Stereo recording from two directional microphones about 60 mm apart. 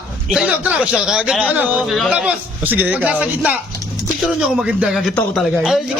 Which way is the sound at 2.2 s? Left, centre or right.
Right.